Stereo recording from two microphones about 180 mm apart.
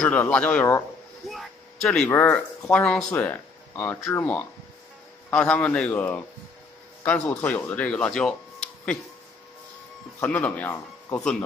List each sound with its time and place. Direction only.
0.0 s speech: 5° left (ahead or behind)
10.2 s speech: 10° left (ahead or behind)